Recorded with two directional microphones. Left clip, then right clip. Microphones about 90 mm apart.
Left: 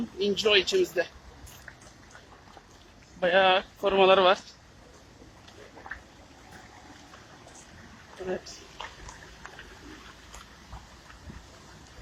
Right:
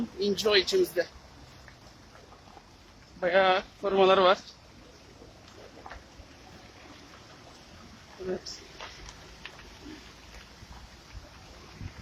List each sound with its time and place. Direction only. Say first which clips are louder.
0.2 s speech: left 2 dB; 15° right (ahead or behind)
0.6 s speech: left 1 dB; 10° right (ahead or behind)
3.2 s speech: left 2 dB; 10° right (ahead or behind)